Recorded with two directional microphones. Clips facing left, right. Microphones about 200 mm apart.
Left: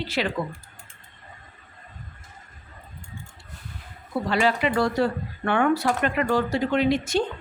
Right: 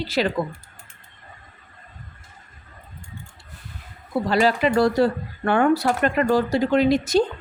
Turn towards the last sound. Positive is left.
turn(degrees=-40)  # may be behind; listen again after turning